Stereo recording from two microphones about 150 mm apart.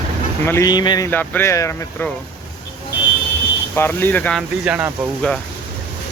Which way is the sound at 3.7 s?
15° left (ahead or behind).